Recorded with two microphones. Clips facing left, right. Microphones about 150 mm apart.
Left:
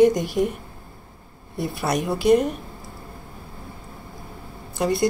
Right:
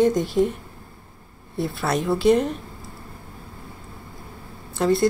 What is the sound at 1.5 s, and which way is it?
A woman's voice, 15° left (ahead or behind).